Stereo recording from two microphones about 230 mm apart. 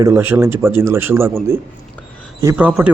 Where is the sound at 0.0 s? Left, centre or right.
Centre.